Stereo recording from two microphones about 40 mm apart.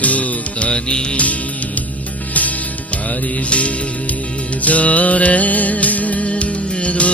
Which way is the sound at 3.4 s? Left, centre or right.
Left.